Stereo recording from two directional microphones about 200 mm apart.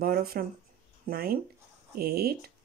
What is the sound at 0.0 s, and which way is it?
Speech, 50° right (ahead or behind).